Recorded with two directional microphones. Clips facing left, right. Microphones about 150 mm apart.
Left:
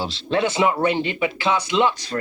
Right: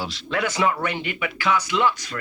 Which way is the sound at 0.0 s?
30° left (ahead or behind).